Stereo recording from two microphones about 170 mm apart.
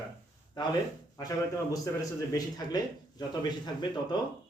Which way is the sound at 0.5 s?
25° left (ahead or behind).